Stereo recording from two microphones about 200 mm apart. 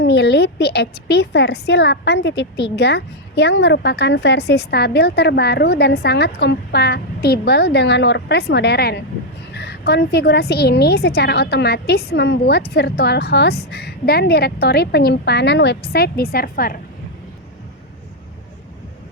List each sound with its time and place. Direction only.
0.0 s a woman's voice: 55° left (ahead or behind)